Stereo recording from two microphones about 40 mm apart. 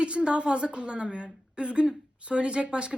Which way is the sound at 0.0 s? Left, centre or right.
Right.